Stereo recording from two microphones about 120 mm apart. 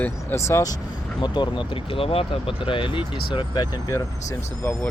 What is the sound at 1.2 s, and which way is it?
Speech, 40° left (ahead or behind).